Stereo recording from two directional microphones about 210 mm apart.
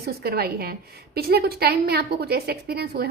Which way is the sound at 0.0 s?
50° right (ahead or behind).